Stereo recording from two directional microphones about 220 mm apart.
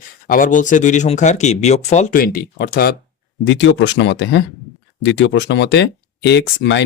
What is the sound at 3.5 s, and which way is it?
Speech, 55° left (ahead or behind).